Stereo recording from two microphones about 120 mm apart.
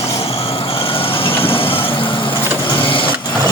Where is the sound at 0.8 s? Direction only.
50° left (ahead or behind).